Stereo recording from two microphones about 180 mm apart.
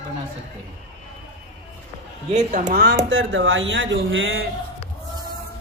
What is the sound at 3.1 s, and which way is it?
Speech, 90° right.